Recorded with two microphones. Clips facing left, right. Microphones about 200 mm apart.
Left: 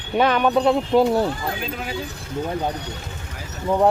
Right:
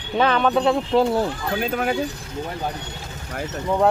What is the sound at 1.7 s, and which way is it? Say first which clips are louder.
Speech: right 7 dB; 55° right (ahead or behind).